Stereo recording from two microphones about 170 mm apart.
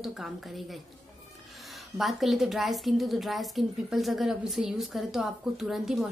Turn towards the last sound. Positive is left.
turn(degrees=0)  # may be behind; listen again after turning